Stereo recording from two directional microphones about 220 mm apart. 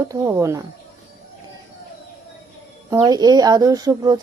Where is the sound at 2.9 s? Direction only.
15° right (ahead or behind).